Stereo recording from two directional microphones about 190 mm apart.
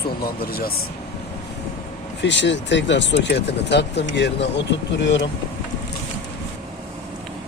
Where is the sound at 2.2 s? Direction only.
70° left (ahead or behind).